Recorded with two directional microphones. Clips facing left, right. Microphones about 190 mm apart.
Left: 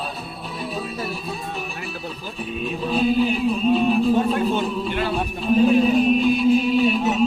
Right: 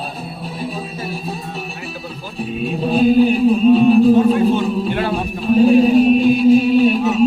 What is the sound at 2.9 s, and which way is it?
Music, 45° right (ahead or behind).